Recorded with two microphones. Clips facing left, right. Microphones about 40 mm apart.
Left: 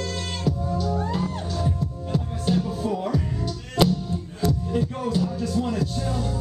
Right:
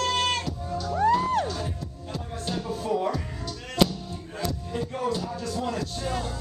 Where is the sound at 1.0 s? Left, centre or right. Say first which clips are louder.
Right 6 dB; right.